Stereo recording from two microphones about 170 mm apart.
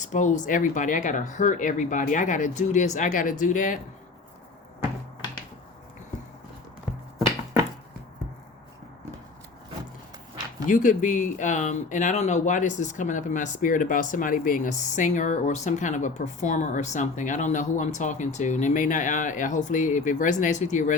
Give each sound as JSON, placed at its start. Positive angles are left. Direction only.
{"t": 0.0, "sound": "speech", "side_deg": 45}
{"t": 10.7, "sound": "speech", "side_deg": 50}